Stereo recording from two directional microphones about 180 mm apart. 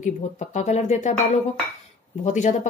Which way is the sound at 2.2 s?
40° left (ahead or behind).